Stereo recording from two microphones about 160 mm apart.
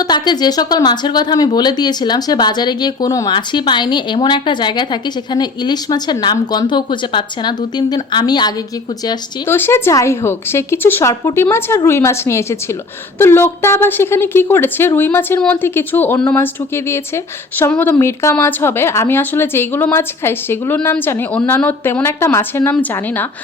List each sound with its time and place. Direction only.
0.0 s speech: 25° left (ahead or behind)
9.5 s a woman's voice: 15° left (ahead or behind)